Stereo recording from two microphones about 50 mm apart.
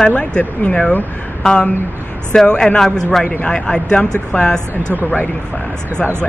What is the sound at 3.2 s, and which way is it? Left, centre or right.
Speech, left.